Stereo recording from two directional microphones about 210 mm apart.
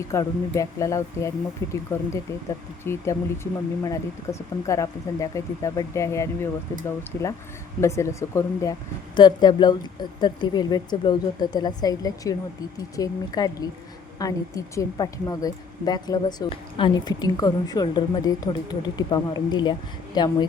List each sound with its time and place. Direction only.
0.1 s speech: 15° left (ahead or behind)
2.8 s a woman's voice: 10° left (ahead or behind)